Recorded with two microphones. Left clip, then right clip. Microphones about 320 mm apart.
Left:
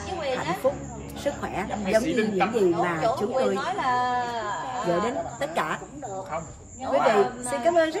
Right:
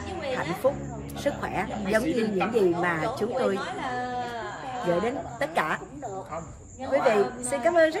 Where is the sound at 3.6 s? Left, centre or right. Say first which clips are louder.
Left 6 dB; left.